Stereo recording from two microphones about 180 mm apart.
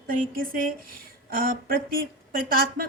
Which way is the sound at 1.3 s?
50° right (ahead or behind).